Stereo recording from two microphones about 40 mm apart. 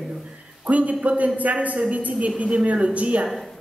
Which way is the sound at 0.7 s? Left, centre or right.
Right.